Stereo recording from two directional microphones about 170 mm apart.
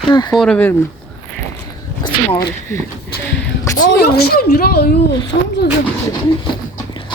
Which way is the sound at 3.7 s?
70° left (ahead or behind).